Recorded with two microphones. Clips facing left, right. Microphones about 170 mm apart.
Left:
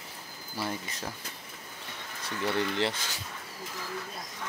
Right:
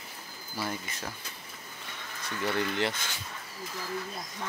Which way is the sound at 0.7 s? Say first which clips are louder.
Left 2 dB; 35° left (ahead or behind).